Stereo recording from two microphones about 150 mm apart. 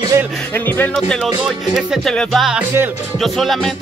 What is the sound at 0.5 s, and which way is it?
Speech, 15° left (ahead or behind).